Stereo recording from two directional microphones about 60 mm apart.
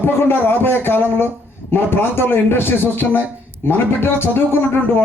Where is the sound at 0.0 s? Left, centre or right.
Left.